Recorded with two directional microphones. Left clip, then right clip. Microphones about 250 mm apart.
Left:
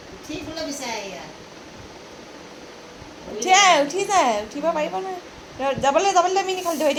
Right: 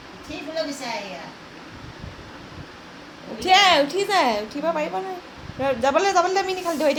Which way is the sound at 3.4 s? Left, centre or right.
Centre.